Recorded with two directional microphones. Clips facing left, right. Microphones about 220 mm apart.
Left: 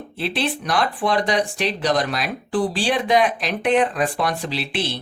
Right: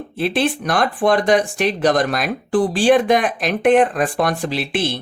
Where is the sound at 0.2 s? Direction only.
50° right (ahead or behind).